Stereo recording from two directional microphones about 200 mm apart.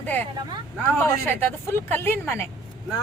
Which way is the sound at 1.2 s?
10° left (ahead or behind).